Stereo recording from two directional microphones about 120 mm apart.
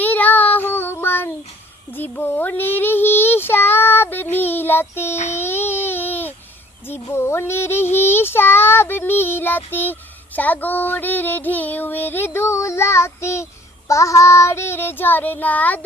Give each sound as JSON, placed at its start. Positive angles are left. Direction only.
{"t": 0.0, "sound": "child singing", "side_deg": 15}
{"t": 5.3, "sound": "a sound", "side_deg": 20}
{"t": 6.8, "sound": "child singing", "side_deg": 20}